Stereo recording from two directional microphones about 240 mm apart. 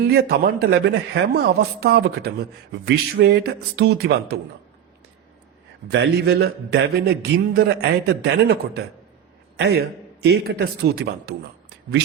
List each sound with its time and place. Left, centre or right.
0.1 s speech: right
5.9 s a man's voice: right